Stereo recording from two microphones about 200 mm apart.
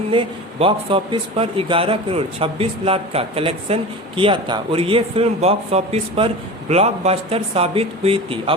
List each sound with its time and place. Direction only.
0.1 s a man's voice: 25° right (ahead or behind)